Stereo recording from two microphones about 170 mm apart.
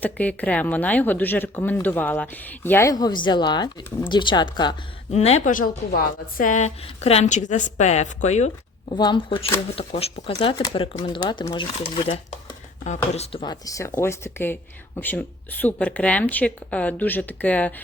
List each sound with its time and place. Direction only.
0.0 s speech: 10° left (ahead or behind); by 4.8 s 25° left (ahead or behind)
5.1 s a woman's voice: 40° left (ahead or behind)
9.0 s speech: 30° left (ahead or behind)
13.4 s speech: 20° left (ahead or behind)